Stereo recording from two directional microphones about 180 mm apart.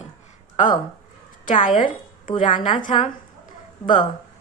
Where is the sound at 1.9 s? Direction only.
30° left (ahead or behind).